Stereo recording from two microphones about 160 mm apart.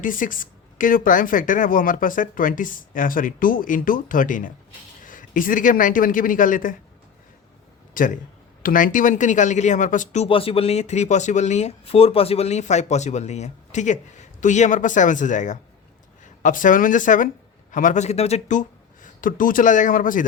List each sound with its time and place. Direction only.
0.0 s speech: 55° left (ahead or behind)
7.9 s speech: 55° left (ahead or behind)
10.2 s speech: 35° left (ahead or behind)
19.0 s speech: 55° left (ahead or behind)